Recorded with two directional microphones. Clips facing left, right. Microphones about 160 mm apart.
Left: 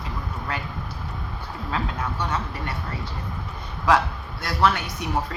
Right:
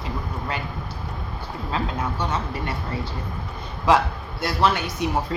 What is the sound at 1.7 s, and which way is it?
Speech, 25° right (ahead or behind).